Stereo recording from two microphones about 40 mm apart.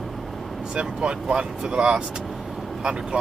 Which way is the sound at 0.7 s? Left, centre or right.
Right.